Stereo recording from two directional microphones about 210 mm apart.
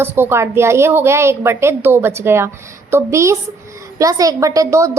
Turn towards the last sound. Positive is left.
turn(degrees=-15)  # may be behind; listen again after turning